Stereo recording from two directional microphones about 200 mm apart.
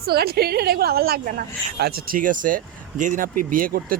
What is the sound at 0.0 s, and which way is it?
A man's voice, 50° right (ahead or behind).